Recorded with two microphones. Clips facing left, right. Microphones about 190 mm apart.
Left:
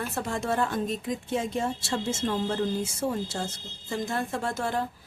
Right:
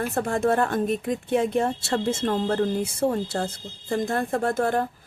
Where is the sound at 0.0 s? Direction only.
50° right (ahead or behind).